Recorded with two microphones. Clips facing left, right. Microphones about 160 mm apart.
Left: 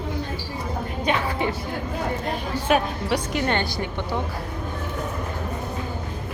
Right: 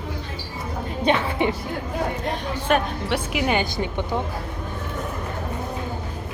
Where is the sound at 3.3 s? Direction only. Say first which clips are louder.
Right 1 dB; 10° right (ahead or behind).